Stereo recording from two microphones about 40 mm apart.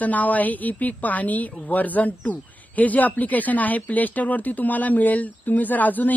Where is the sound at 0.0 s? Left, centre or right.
Left.